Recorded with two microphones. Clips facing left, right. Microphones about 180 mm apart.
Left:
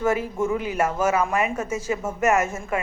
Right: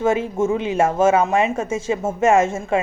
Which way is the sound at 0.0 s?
25° right (ahead or behind).